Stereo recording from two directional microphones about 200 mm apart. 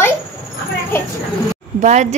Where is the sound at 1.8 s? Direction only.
35° right (ahead or behind).